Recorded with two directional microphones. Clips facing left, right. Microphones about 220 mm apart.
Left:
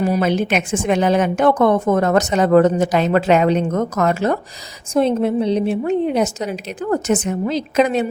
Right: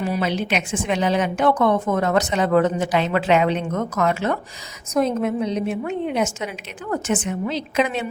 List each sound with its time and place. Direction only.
0.0 s a woman's voice: 45° left (ahead or behind)